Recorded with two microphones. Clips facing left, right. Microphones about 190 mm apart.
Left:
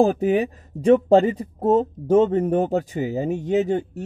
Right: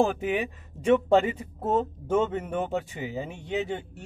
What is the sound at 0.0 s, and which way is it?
Speech, 40° left (ahead or behind).